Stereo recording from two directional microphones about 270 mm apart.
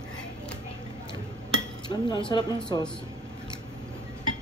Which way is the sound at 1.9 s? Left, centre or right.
Centre.